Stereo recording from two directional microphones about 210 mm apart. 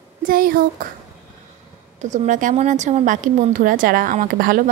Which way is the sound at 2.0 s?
35° right (ahead or behind).